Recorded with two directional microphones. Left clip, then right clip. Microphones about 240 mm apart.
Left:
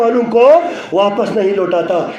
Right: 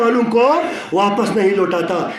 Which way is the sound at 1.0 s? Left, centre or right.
Right.